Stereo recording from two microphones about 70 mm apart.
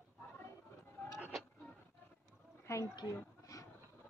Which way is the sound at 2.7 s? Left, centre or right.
Left.